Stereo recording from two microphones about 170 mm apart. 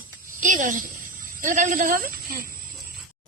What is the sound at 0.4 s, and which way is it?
Speech, 50° right (ahead or behind).